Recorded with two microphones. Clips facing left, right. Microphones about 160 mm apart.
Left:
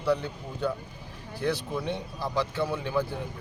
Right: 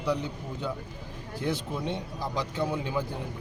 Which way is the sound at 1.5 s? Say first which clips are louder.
Left 2 dB; 20° right (ahead or behind).